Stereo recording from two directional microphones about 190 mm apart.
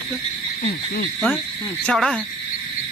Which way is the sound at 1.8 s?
Centre (ahead or behind).